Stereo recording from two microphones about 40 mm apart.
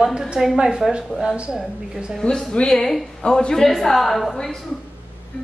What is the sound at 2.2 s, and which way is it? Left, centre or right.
Speech, left.